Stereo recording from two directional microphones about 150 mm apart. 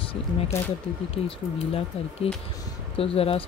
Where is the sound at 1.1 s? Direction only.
40° left (ahead or behind).